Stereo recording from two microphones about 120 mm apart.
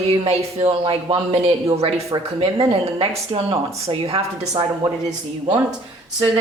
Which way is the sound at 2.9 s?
50° right (ahead or behind).